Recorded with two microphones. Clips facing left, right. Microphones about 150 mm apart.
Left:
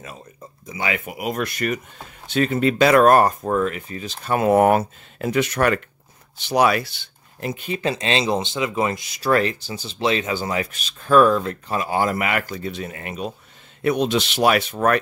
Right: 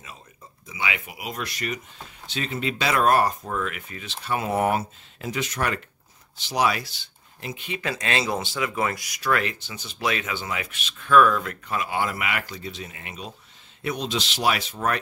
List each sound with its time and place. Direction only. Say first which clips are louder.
0.7 s speech: left 5 dB; 45° left (ahead or behind)
7.8 s speech: left 5 dB; 25° left (ahead or behind); by 15.0 s 60° left (ahead or behind)